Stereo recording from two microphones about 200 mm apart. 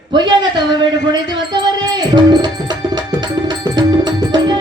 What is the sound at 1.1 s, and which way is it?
Music, 20° right (ahead or behind).